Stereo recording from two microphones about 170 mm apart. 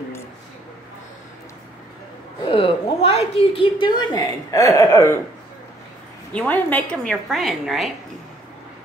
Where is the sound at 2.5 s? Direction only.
35° left (ahead or behind); by 5.2 s 15° left (ahead or behind).